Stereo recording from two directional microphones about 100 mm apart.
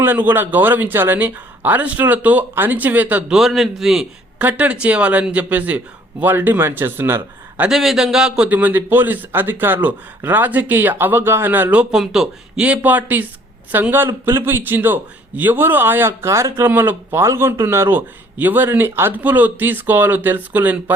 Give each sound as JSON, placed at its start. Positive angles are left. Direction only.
{"t": 0.0, "sound": "speech", "side_deg": -20}
{"t": 4.4, "sound": "speech", "side_deg": -15}
{"t": 7.7, "sound": "speech", "side_deg": -5}
{"t": 8.4, "sound": "a man's voice", "side_deg": -15}